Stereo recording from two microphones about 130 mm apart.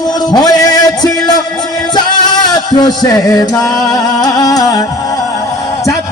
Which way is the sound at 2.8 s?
30° left (ahead or behind).